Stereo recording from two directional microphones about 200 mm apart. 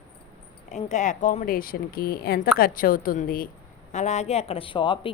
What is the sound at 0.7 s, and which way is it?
A woman's voice, 35° left (ahead or behind).